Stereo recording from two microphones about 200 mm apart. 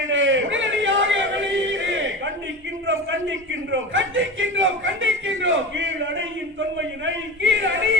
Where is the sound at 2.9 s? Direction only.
70° right (ahead or behind).